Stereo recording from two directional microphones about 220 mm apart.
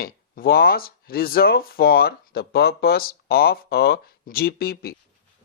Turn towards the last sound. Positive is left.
turn(degrees=45)  # may be behind; listen again after turning